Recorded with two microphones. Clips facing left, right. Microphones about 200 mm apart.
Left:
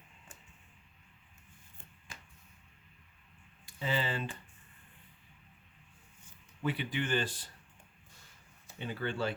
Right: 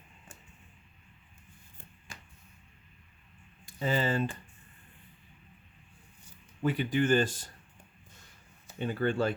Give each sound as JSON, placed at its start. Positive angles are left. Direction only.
{"t": 3.8, "sound": "speech", "side_deg": -45}
{"t": 6.2, "sound": "speech", "side_deg": -45}
{"t": 8.8, "sound": "speech", "side_deg": -50}